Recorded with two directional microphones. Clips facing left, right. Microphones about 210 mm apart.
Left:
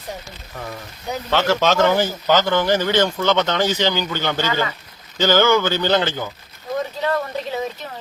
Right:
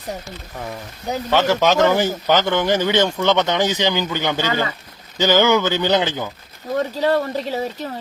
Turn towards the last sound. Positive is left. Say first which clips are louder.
# right 2 dB
turn(degrees=-35)  # may be behind; listen again after turning